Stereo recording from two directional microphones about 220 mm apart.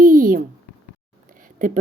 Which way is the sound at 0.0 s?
40° right (ahead or behind).